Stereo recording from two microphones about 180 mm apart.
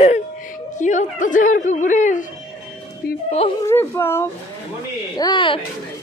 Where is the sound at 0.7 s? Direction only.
45° left (ahead or behind).